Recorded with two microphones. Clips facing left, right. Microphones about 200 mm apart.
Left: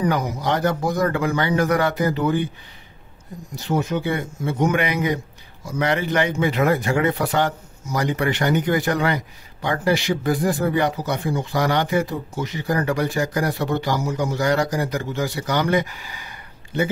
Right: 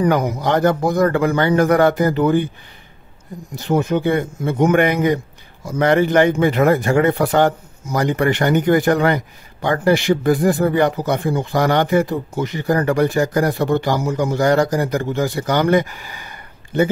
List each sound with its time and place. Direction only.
0.0 s speech: 55° right (ahead or behind)
3.5 s speech: 55° right (ahead or behind)